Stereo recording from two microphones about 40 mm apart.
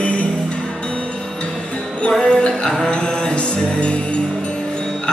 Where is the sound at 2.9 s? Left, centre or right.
Left.